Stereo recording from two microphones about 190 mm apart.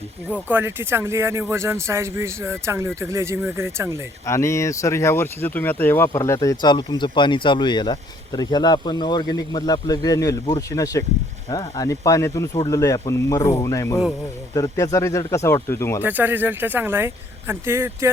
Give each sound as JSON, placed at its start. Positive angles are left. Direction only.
{"t": 0.3, "sound": "speech", "side_deg": -10}
{"t": 4.3, "sound": "speech", "side_deg": 15}
{"t": 16.0, "sound": "speech", "side_deg": -10}